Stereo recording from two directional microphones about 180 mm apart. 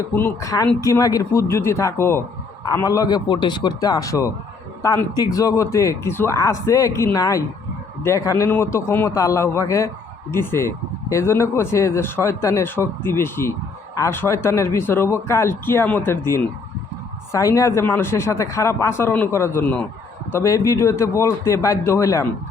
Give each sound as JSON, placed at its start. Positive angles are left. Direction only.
{"t": 0.1, "sound": "a man's voice", "side_deg": 10}